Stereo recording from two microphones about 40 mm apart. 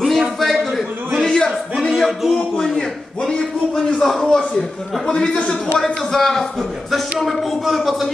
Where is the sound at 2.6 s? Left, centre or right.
Centre.